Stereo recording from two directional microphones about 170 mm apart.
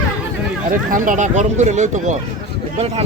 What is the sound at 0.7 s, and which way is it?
Speech, 50° right (ahead or behind).